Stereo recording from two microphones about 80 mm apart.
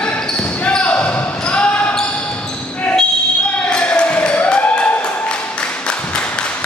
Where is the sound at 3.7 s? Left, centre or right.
Centre.